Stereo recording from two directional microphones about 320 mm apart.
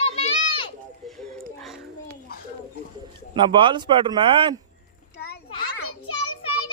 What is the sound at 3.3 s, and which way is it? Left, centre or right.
Speech, centre.